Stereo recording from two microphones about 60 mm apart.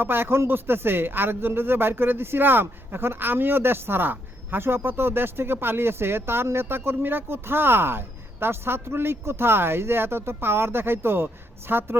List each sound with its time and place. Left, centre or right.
0.0 s speech: right